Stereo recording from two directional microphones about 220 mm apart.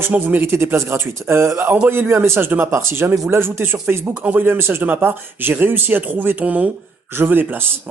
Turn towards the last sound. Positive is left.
turn(degrees=-10)  # may be behind; listen again after turning